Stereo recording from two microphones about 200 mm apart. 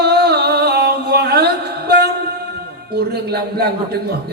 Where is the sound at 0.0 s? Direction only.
55° right (ahead or behind).